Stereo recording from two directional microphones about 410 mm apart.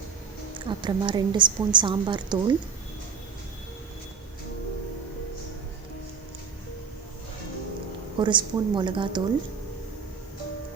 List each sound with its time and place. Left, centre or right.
0.7 s a woman's voice: centre
8.2 s a woman's voice: centre